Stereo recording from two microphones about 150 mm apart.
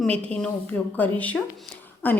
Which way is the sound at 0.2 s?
10° left (ahead or behind).